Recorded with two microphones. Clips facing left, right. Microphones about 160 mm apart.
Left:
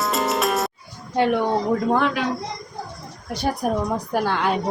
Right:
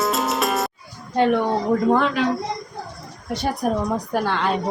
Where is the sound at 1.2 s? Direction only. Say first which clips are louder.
Right 1 dB; 5° left (ahead or behind).